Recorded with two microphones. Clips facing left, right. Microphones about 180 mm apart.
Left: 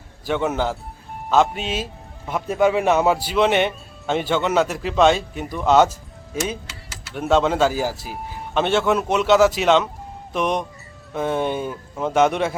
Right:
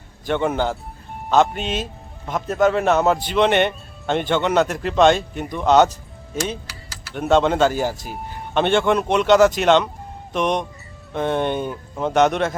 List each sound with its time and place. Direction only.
0.3 s a man's voice: 5° left (ahead or behind)
6.7 s typing: 25° left (ahead or behind)
7.1 s a man's voice: 5° left (ahead or behind)